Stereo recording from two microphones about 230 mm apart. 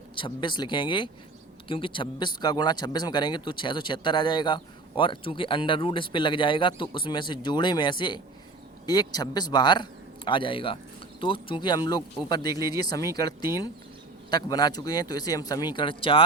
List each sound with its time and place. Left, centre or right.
0.2 s speech: centre